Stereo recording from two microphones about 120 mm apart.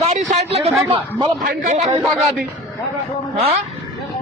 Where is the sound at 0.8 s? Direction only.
40° right (ahead or behind).